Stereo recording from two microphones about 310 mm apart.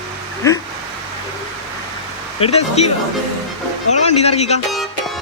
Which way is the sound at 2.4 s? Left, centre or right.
Centre.